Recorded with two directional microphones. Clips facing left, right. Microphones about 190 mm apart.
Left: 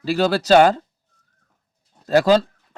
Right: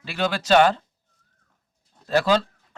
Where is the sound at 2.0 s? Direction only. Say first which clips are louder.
Left 5 dB; 40° left (ahead or behind).